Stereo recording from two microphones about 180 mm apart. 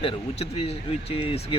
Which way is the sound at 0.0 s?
30° left (ahead or behind).